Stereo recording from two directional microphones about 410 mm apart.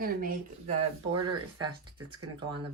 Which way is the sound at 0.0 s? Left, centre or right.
Right.